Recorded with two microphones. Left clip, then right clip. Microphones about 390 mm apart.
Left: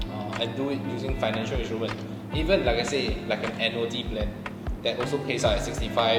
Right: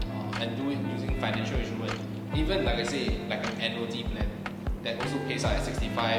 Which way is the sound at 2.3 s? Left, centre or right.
Left.